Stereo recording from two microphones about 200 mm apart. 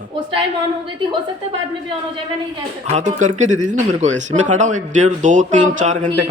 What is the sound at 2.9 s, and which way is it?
Speech, 35° right (ahead or behind).